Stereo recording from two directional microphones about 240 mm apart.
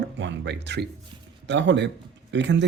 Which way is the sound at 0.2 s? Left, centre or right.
Right.